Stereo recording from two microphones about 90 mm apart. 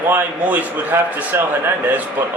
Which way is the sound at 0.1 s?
20° right (ahead or behind).